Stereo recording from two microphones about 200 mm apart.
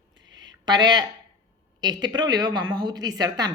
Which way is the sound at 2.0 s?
20° right (ahead or behind).